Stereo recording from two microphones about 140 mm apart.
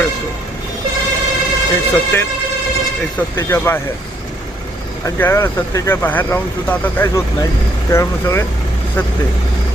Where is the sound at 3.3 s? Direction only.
20° left (ahead or behind).